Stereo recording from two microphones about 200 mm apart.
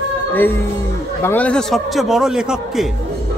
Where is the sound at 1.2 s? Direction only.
10° left (ahead or behind).